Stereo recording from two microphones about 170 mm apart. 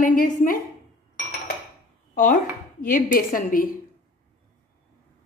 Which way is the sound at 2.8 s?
50° left (ahead or behind).